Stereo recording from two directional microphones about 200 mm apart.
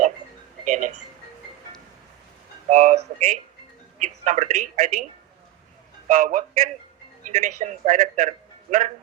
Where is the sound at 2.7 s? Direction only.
40° right (ahead or behind).